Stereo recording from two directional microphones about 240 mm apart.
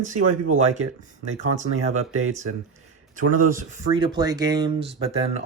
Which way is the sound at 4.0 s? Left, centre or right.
Centre.